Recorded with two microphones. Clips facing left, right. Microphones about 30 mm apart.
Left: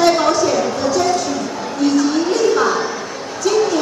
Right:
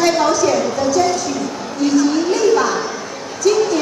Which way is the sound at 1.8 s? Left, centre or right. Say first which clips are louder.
Right 1 dB; left.